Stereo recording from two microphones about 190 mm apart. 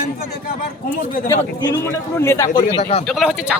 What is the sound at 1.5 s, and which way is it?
Speech, 20° left (ahead or behind).